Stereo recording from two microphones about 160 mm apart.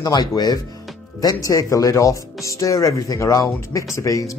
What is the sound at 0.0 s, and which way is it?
Speech, 25° left (ahead or behind).